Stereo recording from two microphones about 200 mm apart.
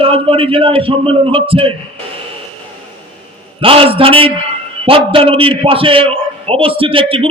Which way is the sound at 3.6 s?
25° right (ahead or behind).